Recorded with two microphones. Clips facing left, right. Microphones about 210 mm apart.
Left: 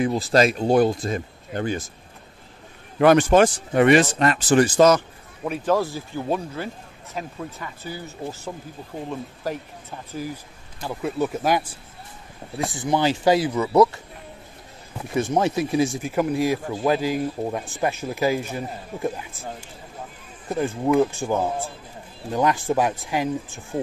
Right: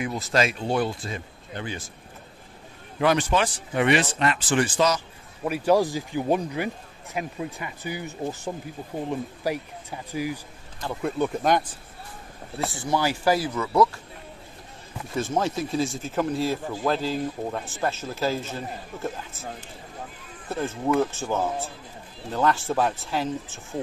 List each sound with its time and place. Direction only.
0.0 s speech: 35° left (ahead or behind)
3.0 s speech: 50° left (ahead or behind)
5.4 s speech: 10° right (ahead or behind)
10.8 s speech: 5° left (ahead or behind)
15.2 s speech: 15° left (ahead or behind)
20.4 s speech: 15° left (ahead or behind)